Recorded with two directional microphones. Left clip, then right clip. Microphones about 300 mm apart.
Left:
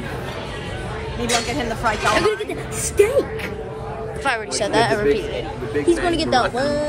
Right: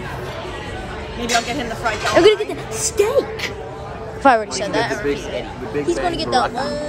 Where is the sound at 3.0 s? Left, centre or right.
Centre.